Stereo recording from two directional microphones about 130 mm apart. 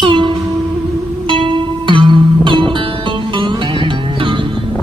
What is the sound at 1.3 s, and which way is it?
Music, 40° right (ahead or behind).